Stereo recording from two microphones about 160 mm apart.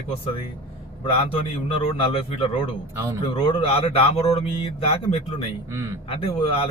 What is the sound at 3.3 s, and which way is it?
Speech, 35° left (ahead or behind).